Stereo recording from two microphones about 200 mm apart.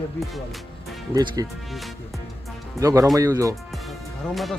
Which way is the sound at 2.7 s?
15° right (ahead or behind).